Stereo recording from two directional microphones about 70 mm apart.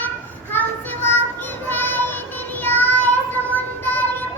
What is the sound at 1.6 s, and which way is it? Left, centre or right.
Child singing, left.